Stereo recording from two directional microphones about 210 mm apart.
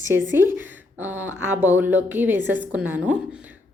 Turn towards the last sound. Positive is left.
turn(degrees=-5)  # may be behind; listen again after turning